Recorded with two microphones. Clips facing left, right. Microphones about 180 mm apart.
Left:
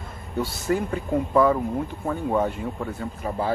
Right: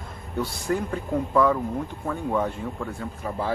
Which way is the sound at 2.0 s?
20° left (ahead or behind).